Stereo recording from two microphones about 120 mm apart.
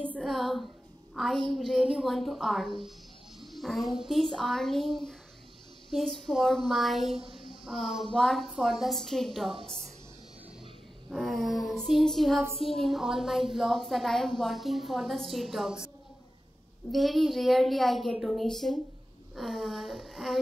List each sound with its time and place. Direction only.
0.2 s a sound: centre (ahead or behind)
1.1 s a woman's voice: centre (ahead or behind)
3.3 s a sound: centre (ahead or behind)
4.3 s a woman's voice: centre (ahead or behind)
9.5 s a woman's voice: 50° right (ahead or behind)
11.1 s a woman's voice: centre (ahead or behind)
12.5 s a woman's voice: 55° left (ahead or behind)
12.8 s a woman's voice: 5° right (ahead or behind)
16.9 s a woman's voice: centre (ahead or behind)